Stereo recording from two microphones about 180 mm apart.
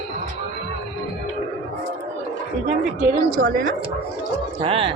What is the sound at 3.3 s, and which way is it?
Speech, 55° right (ahead or behind).